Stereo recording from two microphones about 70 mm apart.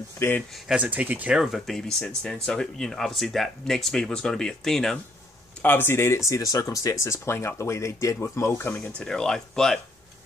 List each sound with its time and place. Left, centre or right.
0.8 s speech: right
1.3 s speech: centre
1.8 s speech: centre
5.6 s speech: left
8.5 s speech: left
8.7 s speech: centre